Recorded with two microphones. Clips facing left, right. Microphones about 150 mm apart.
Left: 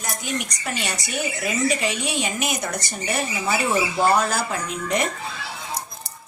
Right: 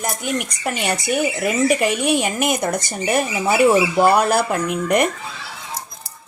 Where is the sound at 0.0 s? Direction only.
55° right (ahead or behind).